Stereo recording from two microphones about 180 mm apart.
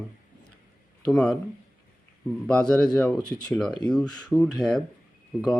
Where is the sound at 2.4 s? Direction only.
5° left (ahead or behind).